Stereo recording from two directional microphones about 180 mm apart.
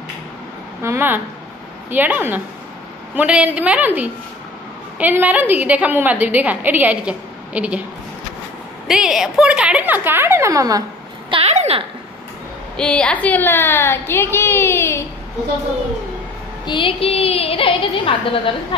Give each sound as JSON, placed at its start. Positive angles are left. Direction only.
{"t": 0.8, "sound": "a woman's voice", "side_deg": -10}
{"t": 8.8, "sound": "a woman's voice", "side_deg": -5}
{"t": 11.2, "sound": "a woman's voice", "side_deg": -35}
{"t": 12.7, "sound": "a woman's voice", "side_deg": 5}
{"t": 16.6, "sound": "a woman's voice", "side_deg": 30}